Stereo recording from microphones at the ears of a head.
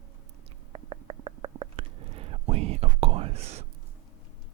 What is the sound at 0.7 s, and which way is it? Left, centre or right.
Whispering, right.